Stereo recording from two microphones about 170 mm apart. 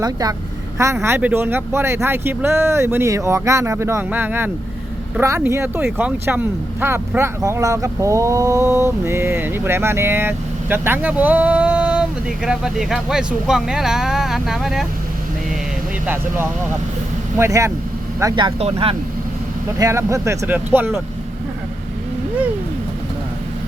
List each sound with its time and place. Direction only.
0.0 s speech: 20° right (ahead or behind); by 14.8 s centre (ahead or behind)
17.3 s speech: 15° right (ahead or behind); by 18.9 s 35° right (ahead or behind)
19.8 s speech: 15° right (ahead or behind)